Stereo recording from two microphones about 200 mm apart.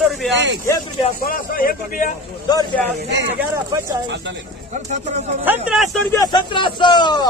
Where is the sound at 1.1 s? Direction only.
45° left (ahead or behind).